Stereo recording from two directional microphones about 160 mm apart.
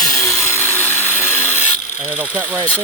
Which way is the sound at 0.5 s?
15° left (ahead or behind).